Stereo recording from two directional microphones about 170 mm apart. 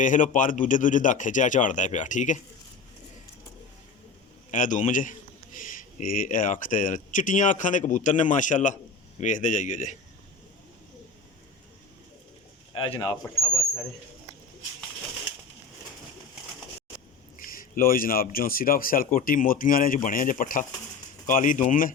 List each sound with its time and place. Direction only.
0.0 s a man's voice: 50° left (ahead or behind)
4.5 s a man's voice: 50° left (ahead or behind)
12.7 s speech: 30° left (ahead or behind)
17.3 s a man's voice: 55° left (ahead or behind)